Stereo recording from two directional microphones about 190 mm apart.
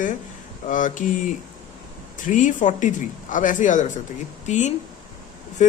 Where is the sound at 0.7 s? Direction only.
40° left (ahead or behind).